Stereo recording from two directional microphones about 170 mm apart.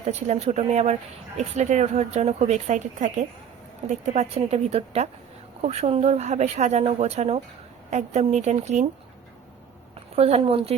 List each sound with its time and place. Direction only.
0.0 s speech: 40° right (ahead or behind)
10.2 s speech: 35° right (ahead or behind)